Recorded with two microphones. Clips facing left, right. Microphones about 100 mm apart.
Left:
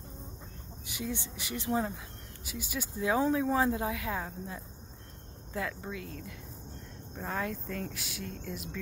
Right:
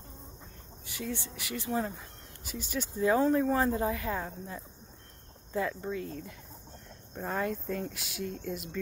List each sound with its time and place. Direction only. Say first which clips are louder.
0.9 s speech: even; 15° left (ahead or behind)
2.4 s speech: right 2 dB; 5° left (ahead or behind)